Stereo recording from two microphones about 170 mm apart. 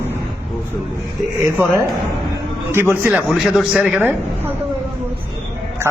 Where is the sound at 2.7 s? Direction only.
15° right (ahead or behind).